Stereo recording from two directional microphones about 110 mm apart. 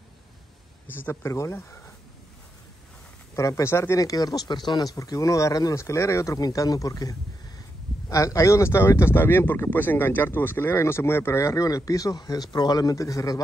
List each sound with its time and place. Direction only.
0.9 s speech: 20° left (ahead or behind)
3.3 s speech: 30° left (ahead or behind)